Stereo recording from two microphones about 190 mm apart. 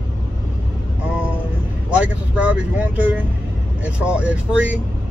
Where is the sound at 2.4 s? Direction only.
5° right (ahead or behind).